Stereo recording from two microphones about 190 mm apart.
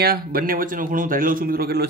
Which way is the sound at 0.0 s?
55° right (ahead or behind).